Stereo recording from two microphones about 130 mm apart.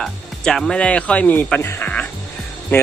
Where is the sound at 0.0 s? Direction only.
5° left (ahead or behind).